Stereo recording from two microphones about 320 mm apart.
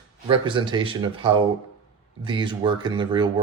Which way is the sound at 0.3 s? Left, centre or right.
Centre.